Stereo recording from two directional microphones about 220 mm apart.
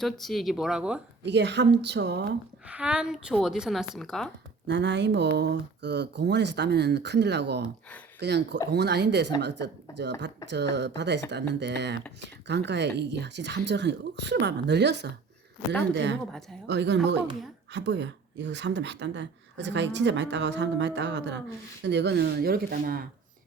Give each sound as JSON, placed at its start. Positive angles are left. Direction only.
{"t": 0.0, "sound": "a woman's voice", "side_deg": 0}
{"t": 1.2, "sound": "speech", "side_deg": -50}
{"t": 2.6, "sound": "a woman's voice", "side_deg": -5}
{"t": 4.7, "sound": "speech", "side_deg": -55}